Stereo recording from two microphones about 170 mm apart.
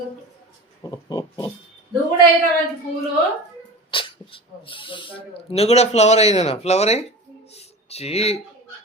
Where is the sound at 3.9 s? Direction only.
30° left (ahead or behind).